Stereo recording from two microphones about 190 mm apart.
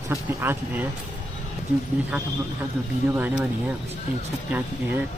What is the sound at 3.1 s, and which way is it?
Speech, 10° right (ahead or behind).